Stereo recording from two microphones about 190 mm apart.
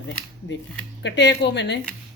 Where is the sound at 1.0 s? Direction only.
65° left (ahead or behind).